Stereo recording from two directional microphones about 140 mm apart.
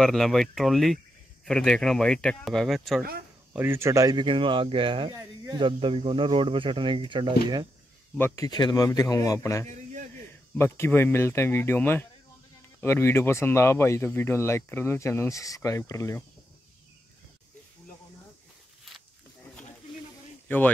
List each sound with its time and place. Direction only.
0.0 s speech: centre (ahead or behind)
3.5 s speech: 15° right (ahead or behind); by 7.3 s 35° right (ahead or behind)
8.5 s a man's voice: 30° left (ahead or behind)
20.4 s speech: 10° left (ahead or behind)